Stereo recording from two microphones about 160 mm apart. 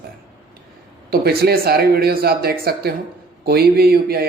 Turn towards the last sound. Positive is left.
turn(degrees=-75)  # may be behind; listen again after turning